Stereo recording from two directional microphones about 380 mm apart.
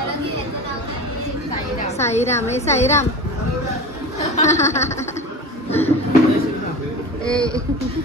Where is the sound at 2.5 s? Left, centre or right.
Centre.